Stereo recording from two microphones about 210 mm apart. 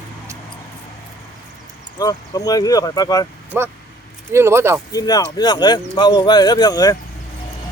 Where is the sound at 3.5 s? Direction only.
10° right (ahead or behind).